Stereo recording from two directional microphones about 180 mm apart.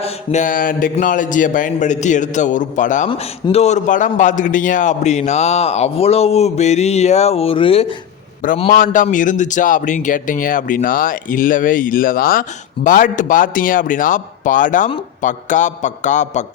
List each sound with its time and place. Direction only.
0.0 s a man's voice: 40° left (ahead or behind)
3.1 s a man's voice: 30° left (ahead or behind)
8.7 s a man's voice: 45° left (ahead or behind)